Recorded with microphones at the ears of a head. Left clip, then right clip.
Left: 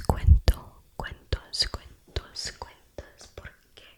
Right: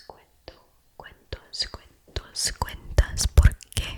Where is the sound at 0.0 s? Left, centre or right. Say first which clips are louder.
Left 15 dB; left.